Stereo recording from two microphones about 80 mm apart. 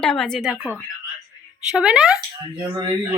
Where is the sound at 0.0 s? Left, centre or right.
Centre.